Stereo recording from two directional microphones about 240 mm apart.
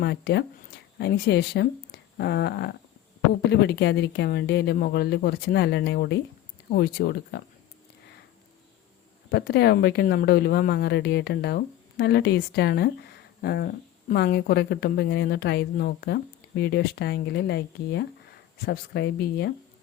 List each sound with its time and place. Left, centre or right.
0.0 s speech: left
9.3 s speech: left